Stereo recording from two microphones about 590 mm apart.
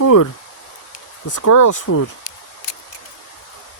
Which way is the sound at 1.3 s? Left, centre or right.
Left.